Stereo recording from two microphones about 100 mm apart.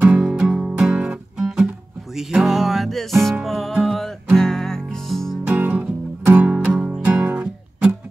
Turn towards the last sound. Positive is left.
turn(degrees=-15)  # may be behind; listen again after turning